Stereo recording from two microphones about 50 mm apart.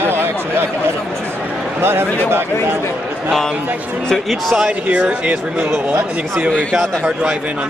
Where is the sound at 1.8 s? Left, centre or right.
Right.